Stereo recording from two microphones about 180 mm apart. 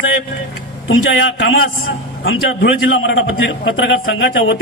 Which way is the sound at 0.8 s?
90° left.